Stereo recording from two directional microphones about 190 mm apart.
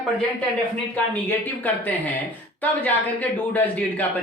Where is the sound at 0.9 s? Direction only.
10° left (ahead or behind).